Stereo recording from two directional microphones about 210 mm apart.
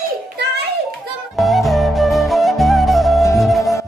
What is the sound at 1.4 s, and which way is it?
Flute, centre (ahead or behind).